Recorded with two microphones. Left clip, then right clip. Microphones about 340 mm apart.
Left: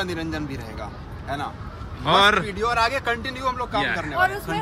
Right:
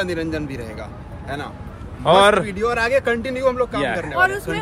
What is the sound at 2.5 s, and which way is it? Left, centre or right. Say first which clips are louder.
Speech: right 2 dB; centre.